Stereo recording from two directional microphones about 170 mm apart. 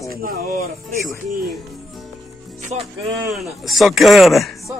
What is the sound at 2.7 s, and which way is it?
Speech, 40° right (ahead or behind).